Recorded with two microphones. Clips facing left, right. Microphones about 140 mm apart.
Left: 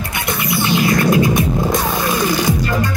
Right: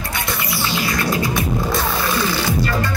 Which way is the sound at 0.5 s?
20° left (ahead or behind).